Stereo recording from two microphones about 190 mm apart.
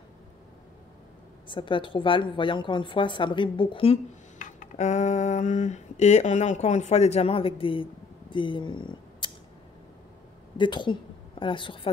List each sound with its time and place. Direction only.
1.5 s a woman's voice: 25° left (ahead or behind)
10.6 s a woman's voice: 25° left (ahead or behind)